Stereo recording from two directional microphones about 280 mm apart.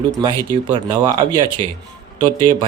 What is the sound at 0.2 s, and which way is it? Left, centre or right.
A man's voice, centre.